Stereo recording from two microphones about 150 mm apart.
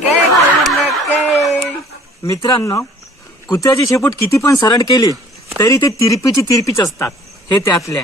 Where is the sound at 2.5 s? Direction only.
20° left (ahead or behind).